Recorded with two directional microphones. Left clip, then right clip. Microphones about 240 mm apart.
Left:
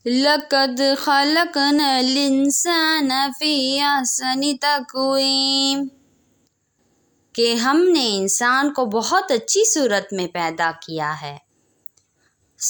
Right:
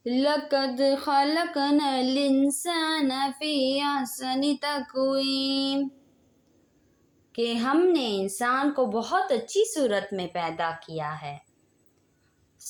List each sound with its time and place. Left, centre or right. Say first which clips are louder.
0.0 s speech: left 7 dB; left
7.3 s speech: left 8 dB; left
12.6 s a sound: left 19 dB; left